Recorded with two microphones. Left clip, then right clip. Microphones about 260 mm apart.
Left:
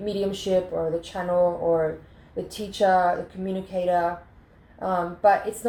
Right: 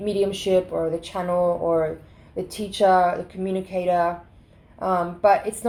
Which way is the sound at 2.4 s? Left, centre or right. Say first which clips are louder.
Right 3 dB; right.